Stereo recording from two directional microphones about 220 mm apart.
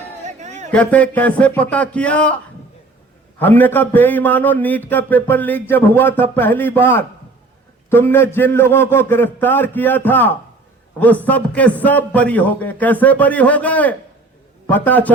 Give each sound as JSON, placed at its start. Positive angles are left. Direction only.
{"t": 0.3, "sound": "a sound", "side_deg": -30}
{"t": 0.7, "sound": "a man's voice", "side_deg": 5}
{"t": 3.3, "sound": "a man's voice", "side_deg": 10}